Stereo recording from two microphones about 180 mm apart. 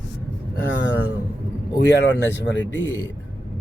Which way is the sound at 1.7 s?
70° left (ahead or behind).